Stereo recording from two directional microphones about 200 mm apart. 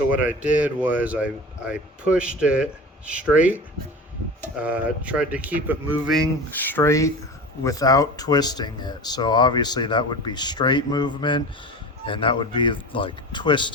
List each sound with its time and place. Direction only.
0.1 s speech: 5° right (ahead or behind)
4.5 s speech: 5° right (ahead or behind)
6.1 s speech: 10° left (ahead or behind)